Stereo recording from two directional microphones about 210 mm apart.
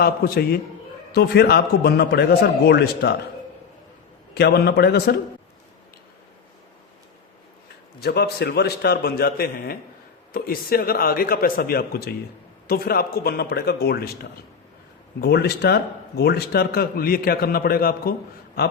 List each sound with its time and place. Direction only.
0.0 s a man's voice: 45° left (ahead or behind)
4.4 s a man's voice: 50° left (ahead or behind)
8.0 s a man's voice: 50° left (ahead or behind)